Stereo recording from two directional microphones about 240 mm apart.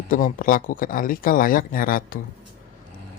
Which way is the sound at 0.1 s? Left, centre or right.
Left.